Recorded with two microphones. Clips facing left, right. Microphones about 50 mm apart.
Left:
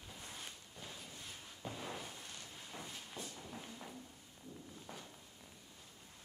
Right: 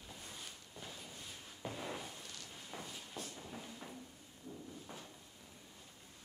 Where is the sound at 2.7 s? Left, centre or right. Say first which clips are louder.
Right 2 dB; centre.